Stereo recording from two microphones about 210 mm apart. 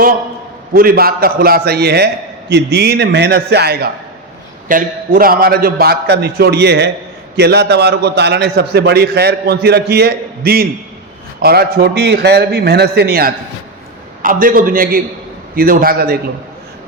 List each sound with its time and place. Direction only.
0.7 s a man's voice: 45° right (ahead or behind)